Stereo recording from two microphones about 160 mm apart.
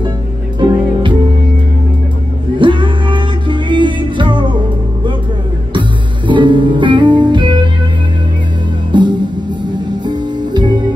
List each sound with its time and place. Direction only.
0.6 s music: 30° right (ahead or behind)
2.6 s music: 30° right (ahead or behind)
5.7 s music: 30° right (ahead or behind)
8.9 s music: 30° right (ahead or behind)